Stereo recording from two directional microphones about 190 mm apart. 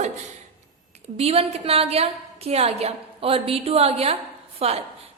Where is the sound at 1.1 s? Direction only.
30° right (ahead or behind).